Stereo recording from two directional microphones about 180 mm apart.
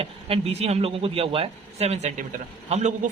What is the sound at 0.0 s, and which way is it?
Speech, 35° right (ahead or behind).